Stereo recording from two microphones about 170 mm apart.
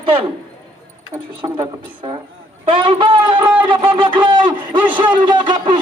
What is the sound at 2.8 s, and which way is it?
Speech, 30° right (ahead or behind).